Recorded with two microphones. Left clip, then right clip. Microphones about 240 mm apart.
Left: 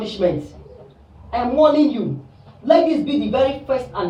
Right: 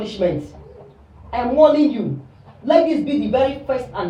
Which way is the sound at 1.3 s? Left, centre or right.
Centre.